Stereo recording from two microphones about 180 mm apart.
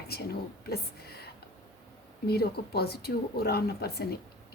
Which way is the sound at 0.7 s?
60° left (ahead or behind).